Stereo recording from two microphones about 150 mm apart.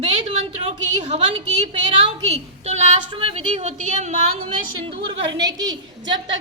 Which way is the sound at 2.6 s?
45° right (ahead or behind).